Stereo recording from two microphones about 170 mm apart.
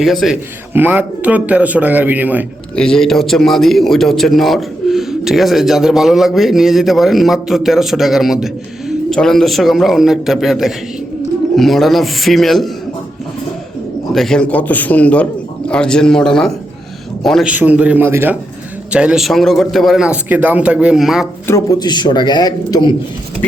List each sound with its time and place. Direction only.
0.0 s a man's voice: centre (ahead or behind)
0.7 s a man's voice: 10° right (ahead or behind)
2.7 s a man's voice: 5° left (ahead or behind)
14.1 s a man's voice: centre (ahead or behind)
21.4 s speech: 20° left (ahead or behind)